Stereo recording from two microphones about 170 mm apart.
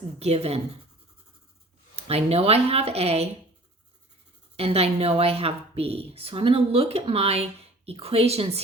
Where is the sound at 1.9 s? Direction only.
35° right (ahead or behind).